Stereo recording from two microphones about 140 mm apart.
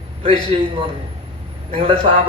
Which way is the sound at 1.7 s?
40° right (ahead or behind).